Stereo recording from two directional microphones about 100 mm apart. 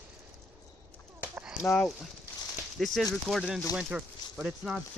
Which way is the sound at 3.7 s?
10° right (ahead or behind).